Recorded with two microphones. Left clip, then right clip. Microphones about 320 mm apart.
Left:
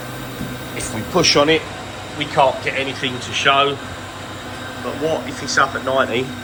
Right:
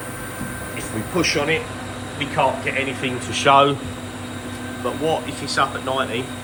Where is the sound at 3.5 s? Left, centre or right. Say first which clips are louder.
Right 2 dB; centre.